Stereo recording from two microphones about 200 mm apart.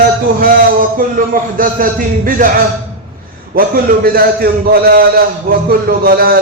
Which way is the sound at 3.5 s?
45° right (ahead or behind).